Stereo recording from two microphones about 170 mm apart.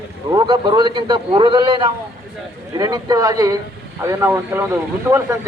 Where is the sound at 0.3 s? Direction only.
25° right (ahead or behind).